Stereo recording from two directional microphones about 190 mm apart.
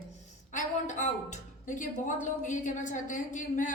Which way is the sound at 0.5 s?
40° left (ahead or behind).